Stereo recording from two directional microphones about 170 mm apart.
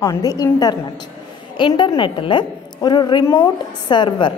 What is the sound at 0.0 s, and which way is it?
A woman's voice, 20° left (ahead or behind).